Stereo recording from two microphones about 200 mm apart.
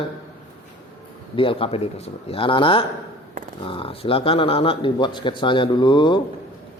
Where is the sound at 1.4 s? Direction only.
25° left (ahead or behind).